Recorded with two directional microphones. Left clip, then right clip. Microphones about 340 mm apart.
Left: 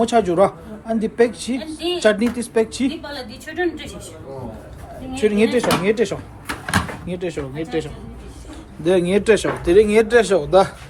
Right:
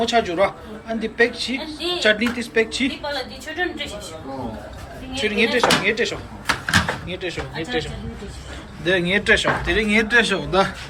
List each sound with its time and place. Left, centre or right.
0.0 s speech: centre
5.1 s speech: centre